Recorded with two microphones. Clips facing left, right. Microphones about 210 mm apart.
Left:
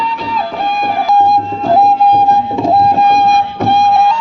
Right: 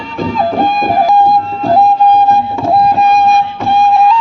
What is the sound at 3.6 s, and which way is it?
Music, 65° left (ahead or behind).